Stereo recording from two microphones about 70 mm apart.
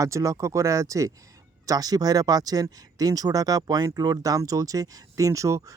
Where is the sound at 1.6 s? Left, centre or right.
Right.